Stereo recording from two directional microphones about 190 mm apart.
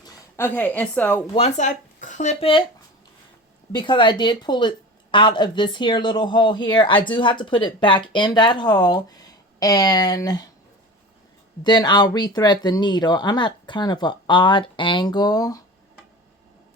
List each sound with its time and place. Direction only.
0.0 s a woman's voice: 10° left (ahead or behind)
1.3 s speech: 35° left (ahead or behind)
3.7 s speech: 25° left (ahead or behind)
11.6 s speech: 25° left (ahead or behind)